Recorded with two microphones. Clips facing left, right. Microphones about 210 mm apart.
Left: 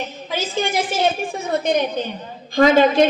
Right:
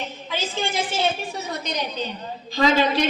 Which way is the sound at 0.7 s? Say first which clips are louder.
Left 4 dB; 50° left (ahead or behind).